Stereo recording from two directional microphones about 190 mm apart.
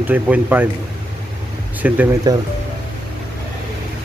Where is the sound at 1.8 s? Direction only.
10° right (ahead or behind).